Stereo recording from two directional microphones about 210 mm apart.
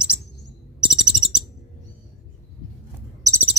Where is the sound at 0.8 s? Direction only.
5° right (ahead or behind).